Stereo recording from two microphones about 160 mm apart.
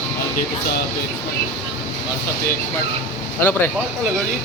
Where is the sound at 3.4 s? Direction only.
15° left (ahead or behind).